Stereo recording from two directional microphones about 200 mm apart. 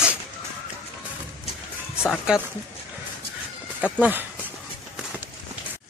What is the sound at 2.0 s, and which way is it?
Speech, 5° right (ahead or behind).